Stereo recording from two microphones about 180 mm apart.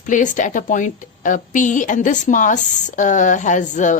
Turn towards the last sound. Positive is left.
turn(degrees=45)  # may be behind; listen again after turning